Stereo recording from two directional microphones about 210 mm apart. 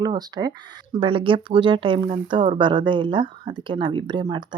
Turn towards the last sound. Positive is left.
turn(degrees=-20)  # may be behind; listen again after turning